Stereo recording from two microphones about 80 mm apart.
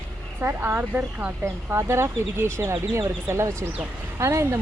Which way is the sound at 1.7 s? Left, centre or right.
Right.